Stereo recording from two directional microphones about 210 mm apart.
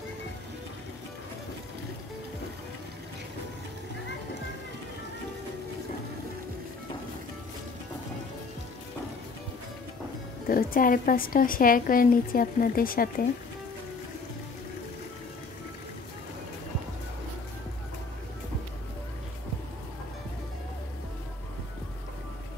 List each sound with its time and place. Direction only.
10.5 s a woman's voice: 45° left (ahead or behind)